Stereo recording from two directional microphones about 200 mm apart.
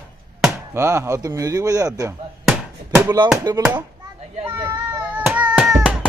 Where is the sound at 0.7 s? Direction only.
15° right (ahead or behind).